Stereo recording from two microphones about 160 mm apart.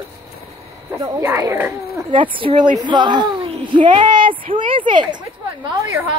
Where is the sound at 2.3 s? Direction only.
30° right (ahead or behind).